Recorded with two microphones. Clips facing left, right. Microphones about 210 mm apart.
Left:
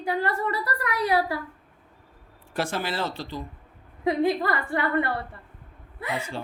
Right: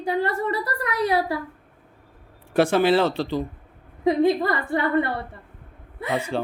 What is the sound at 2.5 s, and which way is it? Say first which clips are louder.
Speech: right 11 dB; 65° right (ahead or behind).